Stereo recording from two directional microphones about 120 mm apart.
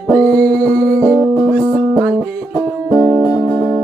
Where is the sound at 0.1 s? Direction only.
10° left (ahead or behind).